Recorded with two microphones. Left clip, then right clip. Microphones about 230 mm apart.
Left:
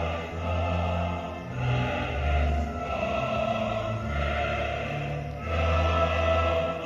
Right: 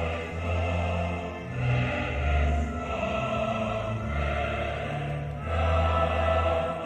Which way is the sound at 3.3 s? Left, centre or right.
Left.